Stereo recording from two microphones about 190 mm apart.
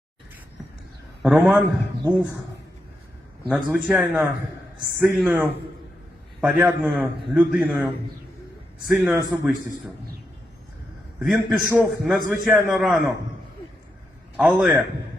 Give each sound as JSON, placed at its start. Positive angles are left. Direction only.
{"t": 1.2, "sound": "a man's voice", "side_deg": -5}
{"t": 2.0, "sound": "speech", "side_deg": -15}
{"t": 3.5, "sound": "a man's voice", "side_deg": -5}
{"t": 8.9, "sound": "a man's voice", "side_deg": 0}
{"t": 11.2, "sound": "a man's voice", "side_deg": 0}
{"t": 14.3, "sound": "a man's voice", "side_deg": 0}